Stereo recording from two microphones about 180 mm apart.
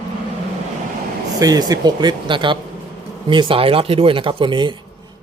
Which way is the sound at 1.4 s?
20° right (ahead or behind).